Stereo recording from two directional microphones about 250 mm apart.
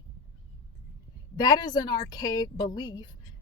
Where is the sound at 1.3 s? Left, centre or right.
Centre.